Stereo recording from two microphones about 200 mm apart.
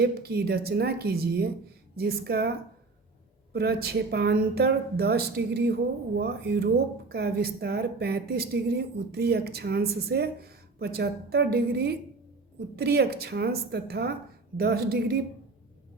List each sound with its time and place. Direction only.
0.0 s a woman's voice: 50° right (ahead or behind)